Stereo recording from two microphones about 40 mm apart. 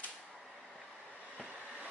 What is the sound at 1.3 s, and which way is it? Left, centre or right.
Train, right.